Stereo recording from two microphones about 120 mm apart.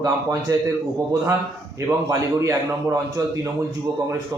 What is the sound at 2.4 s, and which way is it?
A man's voice, 25° right (ahead or behind).